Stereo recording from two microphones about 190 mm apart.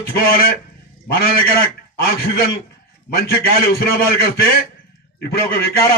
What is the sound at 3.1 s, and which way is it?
A man's voice, 55° left (ahead or behind).